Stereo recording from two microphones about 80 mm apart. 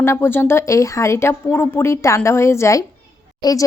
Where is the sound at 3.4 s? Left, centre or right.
Left.